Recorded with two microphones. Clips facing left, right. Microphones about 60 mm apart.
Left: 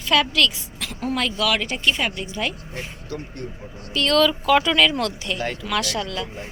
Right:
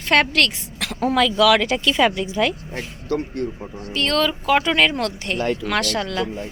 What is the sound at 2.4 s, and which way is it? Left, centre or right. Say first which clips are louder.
Speech: right 5 dB; right.